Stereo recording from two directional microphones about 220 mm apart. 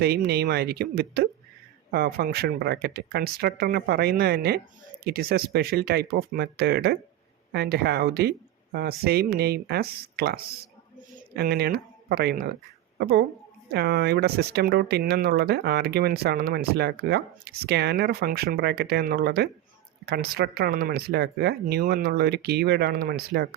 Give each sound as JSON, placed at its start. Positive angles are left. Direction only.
{"t": 0.3, "sound": "speech", "side_deg": -45}